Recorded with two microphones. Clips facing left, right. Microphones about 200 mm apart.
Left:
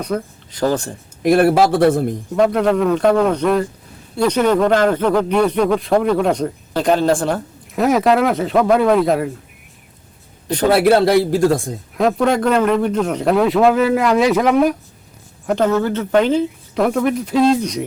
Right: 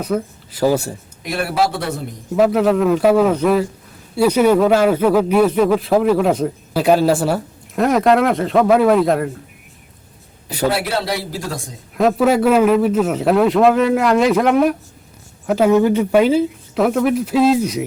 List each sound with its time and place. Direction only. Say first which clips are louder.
0.0 s speech: right 2 dB; 5° right (ahead or behind)
1.2 s a man's voice: left 7 dB; 50° left (ahead or behind)
2.3 s a man's voice: right 1 dB; 5° right (ahead or behind)
10.7 s a man's voice: left 9 dB; 55° left (ahead or behind)
11.9 s a man's voice: right 2 dB; 5° right (ahead or behind)